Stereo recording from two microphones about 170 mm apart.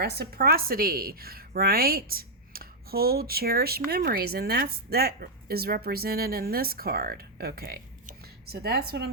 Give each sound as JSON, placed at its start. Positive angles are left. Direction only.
{"t": 0.0, "sound": "a woman's voice", "side_deg": -70}